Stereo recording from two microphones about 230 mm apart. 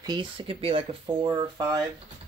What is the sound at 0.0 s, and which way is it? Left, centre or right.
Speech, centre.